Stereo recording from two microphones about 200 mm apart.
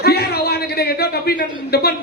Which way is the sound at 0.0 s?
50° left (ahead or behind).